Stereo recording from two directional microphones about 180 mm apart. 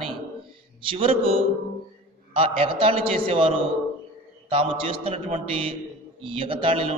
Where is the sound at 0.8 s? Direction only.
30° right (ahead or behind).